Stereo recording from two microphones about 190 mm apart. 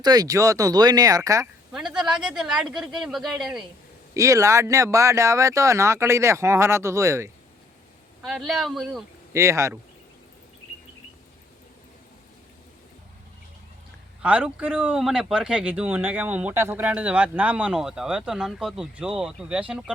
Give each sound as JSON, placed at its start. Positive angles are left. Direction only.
{"t": 0.0, "sound": "speech", "side_deg": -20}
{"t": 1.7, "sound": "speech", "side_deg": -5}
{"t": 4.1, "sound": "speech", "side_deg": -15}
{"t": 8.2, "sound": "speech", "side_deg": 0}
{"t": 9.3, "sound": "speech", "side_deg": -15}
{"t": 14.2, "sound": "speech", "side_deg": -5}